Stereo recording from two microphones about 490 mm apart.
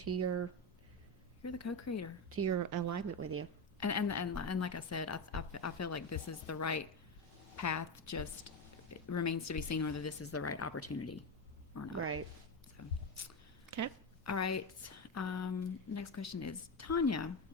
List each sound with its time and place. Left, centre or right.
0.0 s speech: right
1.4 s a woman's voice: left
2.3 s a woman's voice: right
3.8 s a woman's voice: left
13.7 s a sound: right
14.3 s a woman's voice: left
15.1 s a sound: left
16.0 s a woman's voice: left